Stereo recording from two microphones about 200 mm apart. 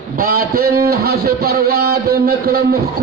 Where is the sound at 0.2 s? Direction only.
50° right (ahead or behind).